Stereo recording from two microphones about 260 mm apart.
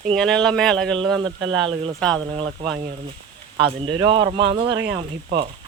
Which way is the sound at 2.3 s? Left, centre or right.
Centre.